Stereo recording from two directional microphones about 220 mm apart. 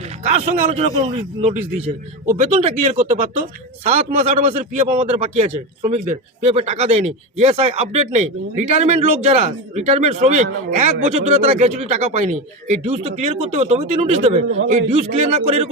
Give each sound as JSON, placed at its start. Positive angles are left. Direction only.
{"t": 0.3, "sound": "a man's voice", "side_deg": -30}